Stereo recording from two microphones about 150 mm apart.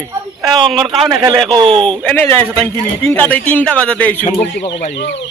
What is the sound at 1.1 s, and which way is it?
Speech, 25° right (ahead or behind).